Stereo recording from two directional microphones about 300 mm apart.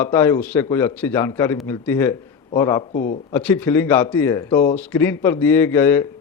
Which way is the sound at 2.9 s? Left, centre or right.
Left.